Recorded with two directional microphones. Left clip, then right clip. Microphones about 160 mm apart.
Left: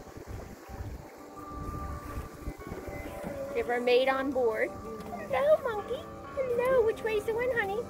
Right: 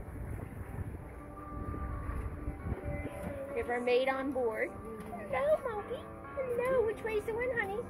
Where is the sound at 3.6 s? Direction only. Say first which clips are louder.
Left 5 dB; 15° left (ahead or behind).